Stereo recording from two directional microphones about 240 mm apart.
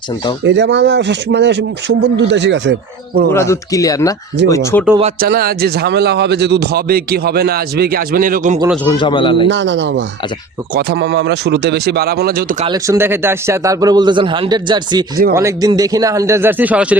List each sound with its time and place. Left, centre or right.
0.4 s speech: right
3.3 s speech: centre
5.2 s speech: right
8.7 s speech: centre
9.0 s speech: left
9.5 s speech: right
12.6 s a man's voice: centre